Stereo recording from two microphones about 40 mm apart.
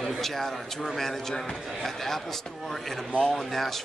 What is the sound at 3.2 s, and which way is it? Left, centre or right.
Speech, centre.